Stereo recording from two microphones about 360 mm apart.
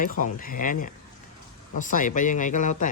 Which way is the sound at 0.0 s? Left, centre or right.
Left.